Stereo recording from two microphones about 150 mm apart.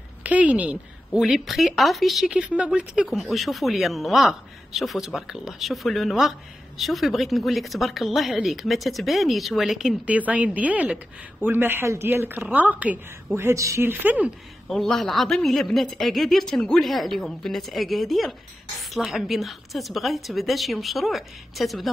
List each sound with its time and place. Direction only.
0.2 s a woman's voice: 10° right (ahead or behind)
14.7 s a woman's voice: centre (ahead or behind)